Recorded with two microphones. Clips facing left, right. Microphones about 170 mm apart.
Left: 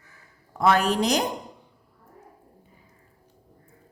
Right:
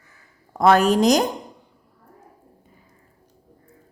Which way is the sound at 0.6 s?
40° right (ahead or behind).